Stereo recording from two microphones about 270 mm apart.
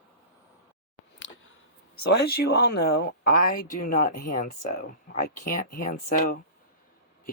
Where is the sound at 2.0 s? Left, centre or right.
Left.